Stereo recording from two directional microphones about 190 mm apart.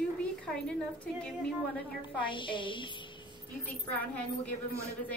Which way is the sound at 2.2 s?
25° left (ahead or behind).